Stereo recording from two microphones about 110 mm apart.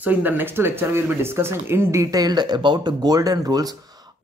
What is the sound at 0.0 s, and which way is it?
Speech, 15° right (ahead or behind).